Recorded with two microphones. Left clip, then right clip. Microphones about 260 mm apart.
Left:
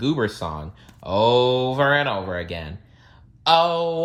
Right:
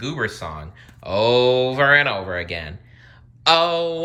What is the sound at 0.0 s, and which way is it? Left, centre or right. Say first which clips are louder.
Speech: left 2 dB; centre.